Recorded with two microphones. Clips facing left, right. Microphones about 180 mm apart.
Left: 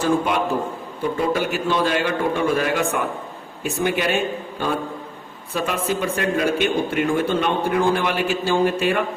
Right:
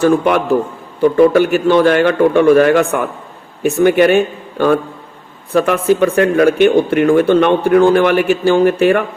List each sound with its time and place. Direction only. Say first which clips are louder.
0.0 s speech: right 8 dB; 65° right (ahead or behind)